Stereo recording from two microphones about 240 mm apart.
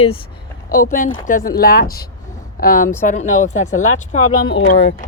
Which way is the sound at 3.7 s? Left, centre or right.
Left.